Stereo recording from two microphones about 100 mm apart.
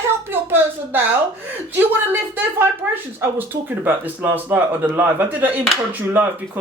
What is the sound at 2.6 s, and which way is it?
Speech, 20° right (ahead or behind).